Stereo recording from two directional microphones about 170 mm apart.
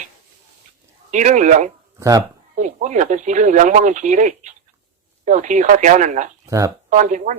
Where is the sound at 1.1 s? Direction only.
45° right (ahead or behind).